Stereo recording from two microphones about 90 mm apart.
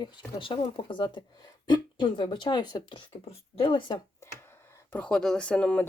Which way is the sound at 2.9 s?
80° left.